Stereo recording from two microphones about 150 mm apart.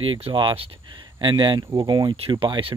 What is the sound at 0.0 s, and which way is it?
Speech, 35° right (ahead or behind).